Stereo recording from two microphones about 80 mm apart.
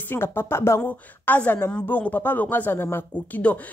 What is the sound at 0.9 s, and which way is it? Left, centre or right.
Speech, left.